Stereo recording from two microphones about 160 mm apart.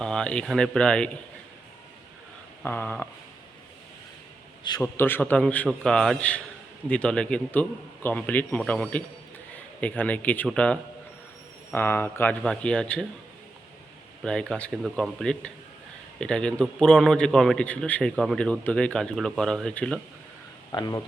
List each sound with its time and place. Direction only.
0.0 s a man's voice: 5° left (ahead or behind)
2.6 s a man's voice: 10° left (ahead or behind)
4.8 s a man's voice: 15° left (ahead or behind)
14.3 s a man's voice: 5° left (ahead or behind)
20.7 s speech: 25° left (ahead or behind)